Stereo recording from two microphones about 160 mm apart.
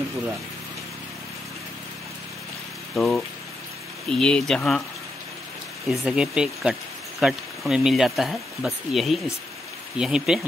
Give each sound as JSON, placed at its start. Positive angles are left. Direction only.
{"t": 3.0, "sound": "speech", "side_deg": 5}
{"t": 5.9, "sound": "speech", "side_deg": -5}